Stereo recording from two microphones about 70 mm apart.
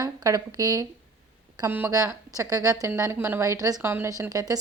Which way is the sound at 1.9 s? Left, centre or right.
Right.